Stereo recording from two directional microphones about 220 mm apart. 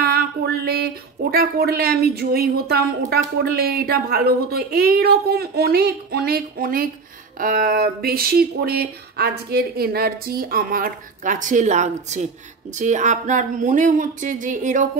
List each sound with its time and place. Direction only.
0.7 s speech: 45° right (ahead or behind)